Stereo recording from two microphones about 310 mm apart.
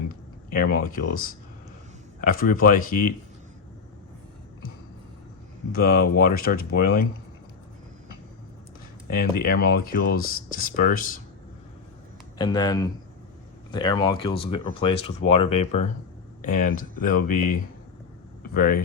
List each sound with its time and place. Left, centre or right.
0.5 s speech: left
5.7 s speech: left
9.1 s speech: left
12.4 s speech: centre